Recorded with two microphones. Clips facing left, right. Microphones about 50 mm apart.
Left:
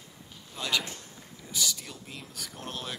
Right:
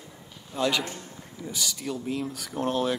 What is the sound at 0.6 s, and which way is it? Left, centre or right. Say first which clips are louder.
A man's voice: right 5 dB; centre.